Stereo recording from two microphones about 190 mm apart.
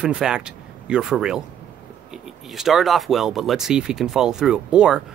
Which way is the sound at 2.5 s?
Centre (ahead or behind).